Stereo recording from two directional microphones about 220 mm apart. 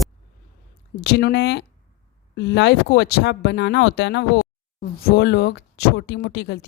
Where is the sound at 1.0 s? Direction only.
50° left (ahead or behind).